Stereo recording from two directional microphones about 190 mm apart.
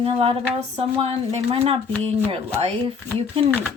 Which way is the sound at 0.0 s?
30° right (ahead or behind).